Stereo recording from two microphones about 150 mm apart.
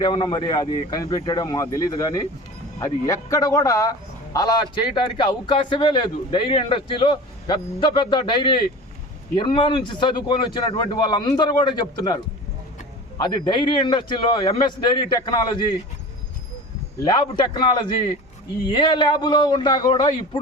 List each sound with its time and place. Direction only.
0.0 s a man's voice: 30° left (ahead or behind)
17.0 s a man's voice: 30° left (ahead or behind)